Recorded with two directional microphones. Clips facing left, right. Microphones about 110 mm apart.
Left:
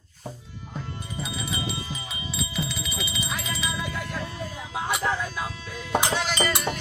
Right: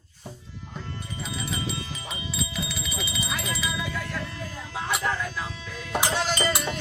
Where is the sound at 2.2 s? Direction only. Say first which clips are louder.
Left 2 dB; centre (ahead or behind).